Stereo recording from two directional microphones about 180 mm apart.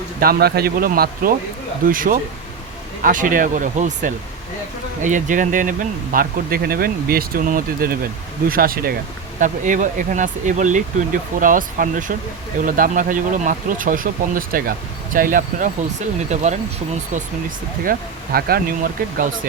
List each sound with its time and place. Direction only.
0.2 s speech: 60° right (ahead or behind); by 16.6 s 40° right (ahead or behind)
17.8 s speech: 55° right (ahead or behind)